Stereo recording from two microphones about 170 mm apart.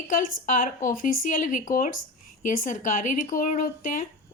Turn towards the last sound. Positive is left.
turn(degrees=50)  # may be behind; listen again after turning